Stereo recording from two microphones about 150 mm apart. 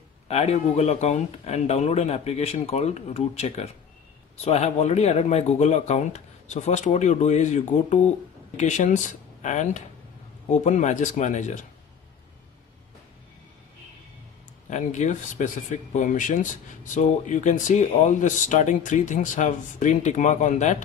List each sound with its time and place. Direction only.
0.3 s speech: 45° left (ahead or behind)
14.7 s speech: 55° left (ahead or behind)